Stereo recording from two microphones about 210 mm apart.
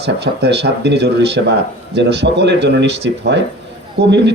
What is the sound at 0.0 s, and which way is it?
Speech, 55° right (ahead or behind).